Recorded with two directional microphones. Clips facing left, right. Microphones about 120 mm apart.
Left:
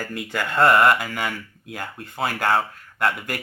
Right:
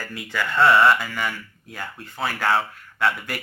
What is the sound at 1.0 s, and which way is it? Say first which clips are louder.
Speech: left 1 dB; 20° left (ahead or behind).